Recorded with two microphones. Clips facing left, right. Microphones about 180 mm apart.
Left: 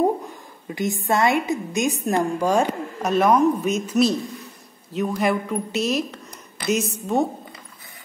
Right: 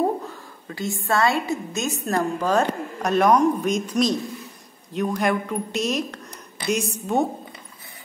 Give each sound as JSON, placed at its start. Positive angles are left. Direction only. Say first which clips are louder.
{"t": 0.7, "sound": "a woman's voice", "louder": "left 3 dB", "side_deg": 20}